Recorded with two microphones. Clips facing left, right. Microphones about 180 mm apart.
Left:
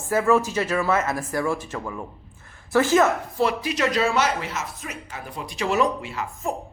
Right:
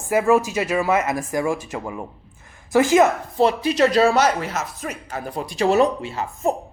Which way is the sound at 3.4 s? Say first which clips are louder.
Right 6 dB; 30° right (ahead or behind).